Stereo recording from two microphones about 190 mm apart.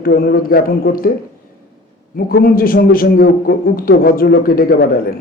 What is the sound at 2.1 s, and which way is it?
A man's voice, 50° left (ahead or behind).